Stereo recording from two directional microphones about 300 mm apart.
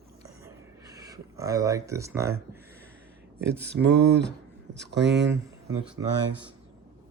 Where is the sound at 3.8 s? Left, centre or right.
Right.